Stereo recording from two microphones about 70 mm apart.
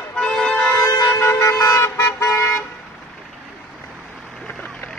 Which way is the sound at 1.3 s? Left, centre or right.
Left.